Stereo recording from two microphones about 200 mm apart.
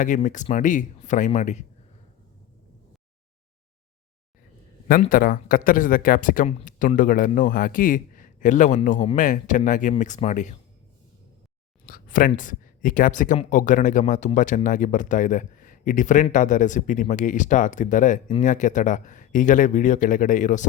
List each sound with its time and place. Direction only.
0.0 s speech: 40° left (ahead or behind)
4.9 s a man's voice: 45° left (ahead or behind)
11.9 s a sound: 45° left (ahead or behind)
12.4 s speech: 40° left (ahead or behind)